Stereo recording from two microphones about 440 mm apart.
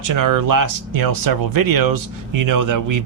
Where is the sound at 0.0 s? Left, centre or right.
Right.